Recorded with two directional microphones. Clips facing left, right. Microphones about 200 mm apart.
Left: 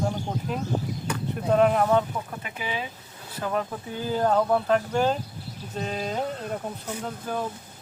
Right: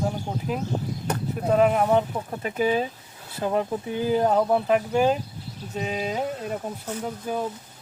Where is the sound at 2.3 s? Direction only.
40° right (ahead or behind).